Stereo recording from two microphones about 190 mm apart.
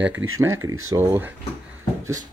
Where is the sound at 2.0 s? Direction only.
15° right (ahead or behind).